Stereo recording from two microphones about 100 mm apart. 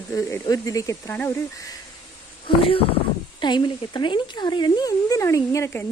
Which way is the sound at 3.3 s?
50° left (ahead or behind).